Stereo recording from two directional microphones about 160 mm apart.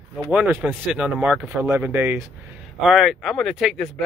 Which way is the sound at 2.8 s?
Centre (ahead or behind).